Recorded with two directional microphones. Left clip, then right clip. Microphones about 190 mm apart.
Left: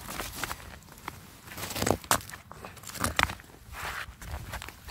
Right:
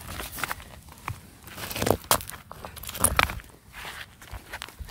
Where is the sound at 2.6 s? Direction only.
15° right (ahead or behind).